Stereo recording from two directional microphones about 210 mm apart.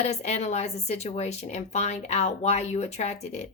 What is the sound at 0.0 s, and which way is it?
A woman's voice, 30° left (ahead or behind).